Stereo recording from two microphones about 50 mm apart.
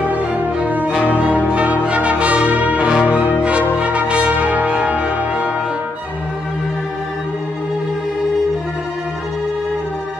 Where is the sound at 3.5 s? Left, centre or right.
Right.